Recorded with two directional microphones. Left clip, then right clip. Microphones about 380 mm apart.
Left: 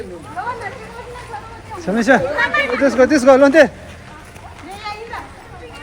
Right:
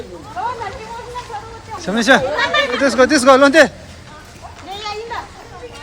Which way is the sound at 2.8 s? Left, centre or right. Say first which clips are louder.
Even; centre.